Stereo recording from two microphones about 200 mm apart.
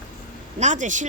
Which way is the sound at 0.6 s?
40° right (ahead or behind).